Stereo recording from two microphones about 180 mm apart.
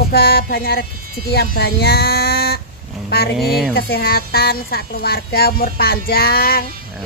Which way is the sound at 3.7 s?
60° left (ahead or behind).